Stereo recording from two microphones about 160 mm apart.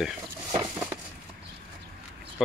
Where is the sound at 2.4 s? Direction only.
Centre (ahead or behind).